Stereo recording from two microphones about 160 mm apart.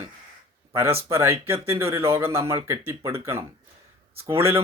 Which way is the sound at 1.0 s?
15° right (ahead or behind).